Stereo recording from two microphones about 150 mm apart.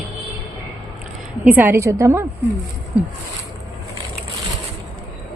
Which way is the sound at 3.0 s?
10° right (ahead or behind).